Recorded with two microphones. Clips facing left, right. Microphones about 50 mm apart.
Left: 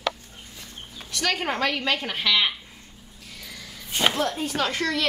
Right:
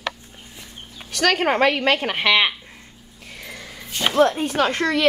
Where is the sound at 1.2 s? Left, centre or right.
Right.